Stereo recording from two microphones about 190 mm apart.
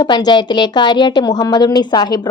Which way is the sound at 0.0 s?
25° left (ahead or behind).